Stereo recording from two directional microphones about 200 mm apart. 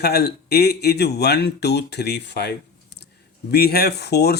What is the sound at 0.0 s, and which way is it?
Speech, 55° left (ahead or behind).